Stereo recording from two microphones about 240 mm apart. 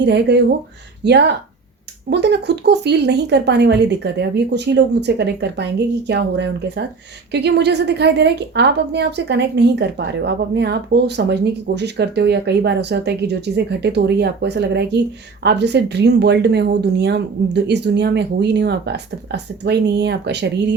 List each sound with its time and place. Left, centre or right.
0.0 s a woman's voice: right